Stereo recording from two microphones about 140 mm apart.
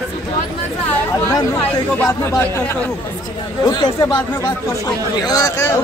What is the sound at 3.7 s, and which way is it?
Speech, 35° left (ahead or behind).